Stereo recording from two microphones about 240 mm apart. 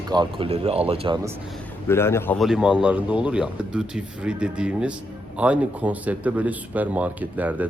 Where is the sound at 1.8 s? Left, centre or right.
Centre.